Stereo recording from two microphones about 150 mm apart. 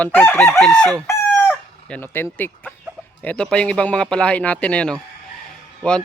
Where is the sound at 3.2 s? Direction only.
5° left (ahead or behind).